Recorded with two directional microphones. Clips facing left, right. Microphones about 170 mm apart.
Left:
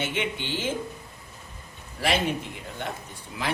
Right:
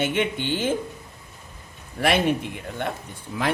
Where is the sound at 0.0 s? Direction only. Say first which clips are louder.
Right 6 dB; 55° right (ahead or behind).